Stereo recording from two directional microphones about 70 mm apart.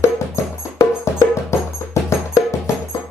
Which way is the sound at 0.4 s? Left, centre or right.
Left.